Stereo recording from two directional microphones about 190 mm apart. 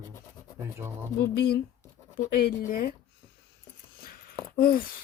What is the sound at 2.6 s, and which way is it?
Speech, 50° left (ahead or behind).